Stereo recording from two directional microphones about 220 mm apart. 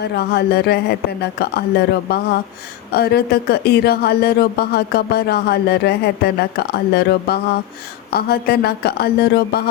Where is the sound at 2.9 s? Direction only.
45° left (ahead or behind).